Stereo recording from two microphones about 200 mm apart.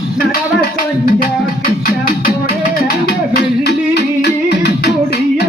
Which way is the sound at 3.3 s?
55° left (ahead or behind).